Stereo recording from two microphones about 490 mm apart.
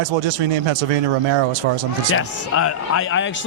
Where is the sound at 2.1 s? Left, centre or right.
Left.